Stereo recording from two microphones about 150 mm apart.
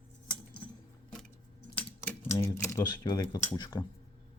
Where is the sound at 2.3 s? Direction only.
20° left (ahead or behind).